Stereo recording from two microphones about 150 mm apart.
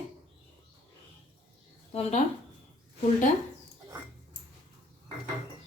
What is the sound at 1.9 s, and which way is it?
Speech, 45° left (ahead or behind).